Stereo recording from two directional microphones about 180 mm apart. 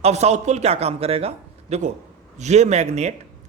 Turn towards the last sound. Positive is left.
turn(degrees=-40)  # may be behind; listen again after turning